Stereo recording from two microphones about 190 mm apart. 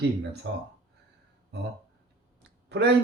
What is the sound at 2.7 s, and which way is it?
Speech, 65° right (ahead or behind).